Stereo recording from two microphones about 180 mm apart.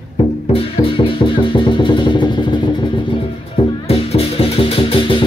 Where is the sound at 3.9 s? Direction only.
35° left (ahead or behind).